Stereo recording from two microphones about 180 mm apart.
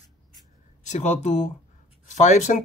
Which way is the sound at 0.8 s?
40° left (ahead or behind).